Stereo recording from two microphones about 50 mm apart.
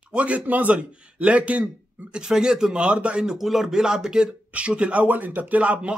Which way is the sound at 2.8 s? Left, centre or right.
Right.